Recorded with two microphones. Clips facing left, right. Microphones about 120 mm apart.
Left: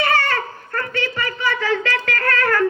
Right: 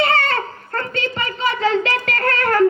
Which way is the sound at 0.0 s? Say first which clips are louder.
Right 1 dB; 25° right (ahead or behind).